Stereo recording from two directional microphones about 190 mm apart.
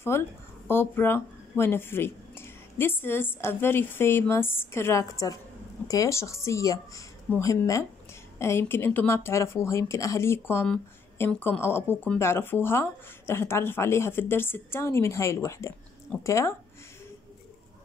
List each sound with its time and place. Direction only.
0.0 s speech: 15° left (ahead or behind)